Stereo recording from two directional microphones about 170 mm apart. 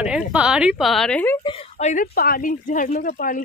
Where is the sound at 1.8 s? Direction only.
45° left (ahead or behind).